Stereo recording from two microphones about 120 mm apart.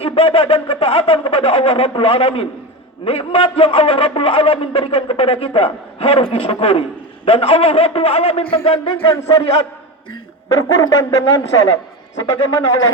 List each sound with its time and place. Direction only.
0.0 s a sound: 50° left (ahead or behind)
3.0 s a man's voice: 50° left (ahead or behind)
10.8 s a man's voice: 30° left (ahead or behind)